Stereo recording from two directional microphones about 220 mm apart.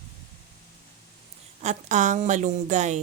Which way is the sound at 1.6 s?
30° right (ahead or behind).